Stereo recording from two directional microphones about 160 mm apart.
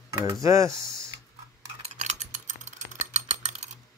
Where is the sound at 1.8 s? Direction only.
45° right (ahead or behind).